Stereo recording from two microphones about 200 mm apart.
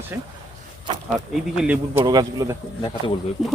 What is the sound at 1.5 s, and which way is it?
Speech, 5° right (ahead or behind).